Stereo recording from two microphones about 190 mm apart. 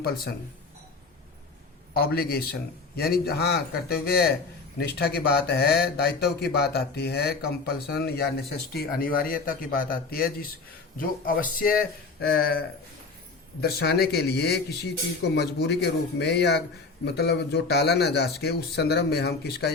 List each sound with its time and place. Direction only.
1.9 s speech: 55° left (ahead or behind)